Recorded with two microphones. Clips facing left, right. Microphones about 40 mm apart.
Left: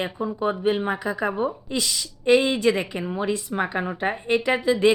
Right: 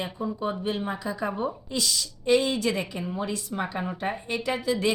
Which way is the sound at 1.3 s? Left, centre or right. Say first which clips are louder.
Left 4 dB; centre.